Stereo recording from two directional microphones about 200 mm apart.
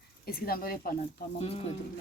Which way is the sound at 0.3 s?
50° left (ahead or behind).